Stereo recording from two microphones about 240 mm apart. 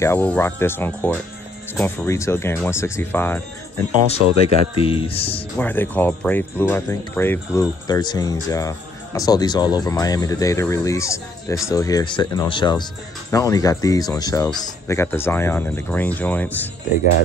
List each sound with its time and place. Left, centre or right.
0.0 s speech: centre
4.2 s speech: right
4.8 s speech: left
5.6 s speech: centre